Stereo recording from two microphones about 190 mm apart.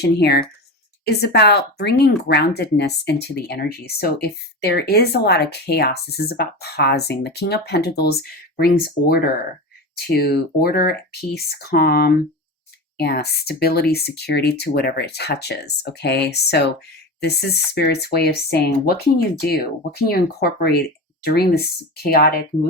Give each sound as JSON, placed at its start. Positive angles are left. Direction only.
{"t": 0.0, "sound": "speech", "side_deg": 60}